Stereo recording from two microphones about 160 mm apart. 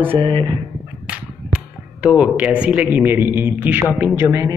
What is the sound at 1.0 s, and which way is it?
A woman's voice, 5° right (ahead or behind).